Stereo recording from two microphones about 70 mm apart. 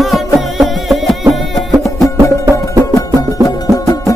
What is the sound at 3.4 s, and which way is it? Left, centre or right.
Music, left.